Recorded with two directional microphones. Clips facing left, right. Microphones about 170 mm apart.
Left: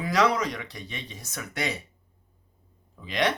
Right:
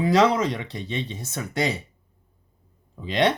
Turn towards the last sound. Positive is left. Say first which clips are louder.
# right 5 dB
turn(degrees=-30)  # may be behind; listen again after turning